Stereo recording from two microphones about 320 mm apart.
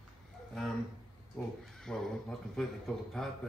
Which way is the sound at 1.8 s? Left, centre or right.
Centre.